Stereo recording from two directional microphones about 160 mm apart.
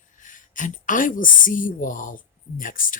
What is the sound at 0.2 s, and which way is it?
Speech, 55° left (ahead or behind).